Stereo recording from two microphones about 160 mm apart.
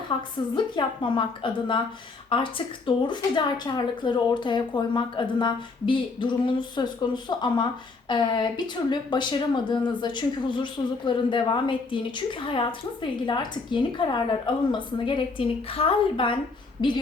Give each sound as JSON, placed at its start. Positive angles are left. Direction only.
{"t": 0.5, "sound": "a woman's voice", "side_deg": 30}